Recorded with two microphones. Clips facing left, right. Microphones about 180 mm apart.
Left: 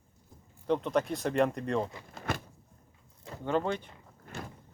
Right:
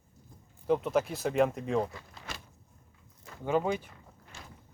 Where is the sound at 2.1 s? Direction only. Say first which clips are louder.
Left 10 dB; 55° left (ahead or behind).